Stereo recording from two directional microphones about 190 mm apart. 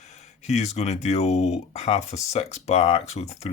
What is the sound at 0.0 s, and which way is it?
Speech, 35° left (ahead or behind).